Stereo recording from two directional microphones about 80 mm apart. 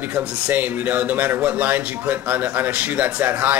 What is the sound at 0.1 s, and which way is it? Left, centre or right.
Speech, centre.